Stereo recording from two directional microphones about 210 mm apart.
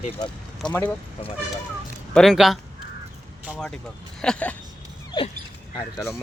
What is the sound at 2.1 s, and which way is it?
Speech, centre (ahead or behind).